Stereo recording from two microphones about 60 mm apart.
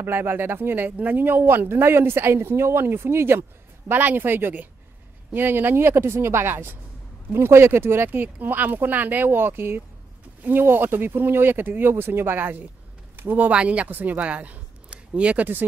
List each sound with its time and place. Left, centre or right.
0.0 s speech: right
3.9 s speech: right
13.1 s a sound: right
13.5 s speech: right